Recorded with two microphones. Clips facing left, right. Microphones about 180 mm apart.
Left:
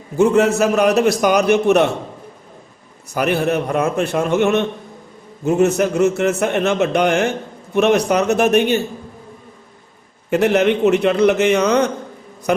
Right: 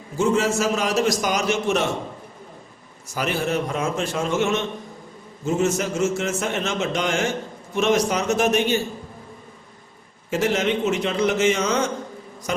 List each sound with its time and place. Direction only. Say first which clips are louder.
0.2 s a man's voice: left 7 dB; 60° left (ahead or behind)
3.2 s a man's voice: left 6 dB; 60° left (ahead or behind)
10.2 s a man's voice: left 7 dB; 60° left (ahead or behind)